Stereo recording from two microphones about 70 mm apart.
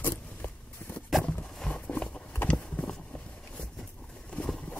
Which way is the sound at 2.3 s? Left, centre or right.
Left.